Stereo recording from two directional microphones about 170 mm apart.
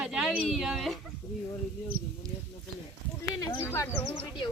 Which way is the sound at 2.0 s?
55° right (ahead or behind).